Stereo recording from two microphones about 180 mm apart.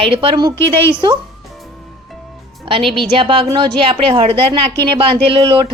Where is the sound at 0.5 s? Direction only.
15° left (ahead or behind).